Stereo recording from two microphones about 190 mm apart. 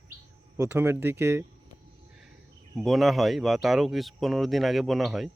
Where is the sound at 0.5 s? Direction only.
15° right (ahead or behind).